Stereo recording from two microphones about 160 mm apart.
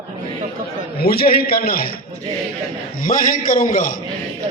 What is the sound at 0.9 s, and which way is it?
Speech, 75° left (ahead or behind).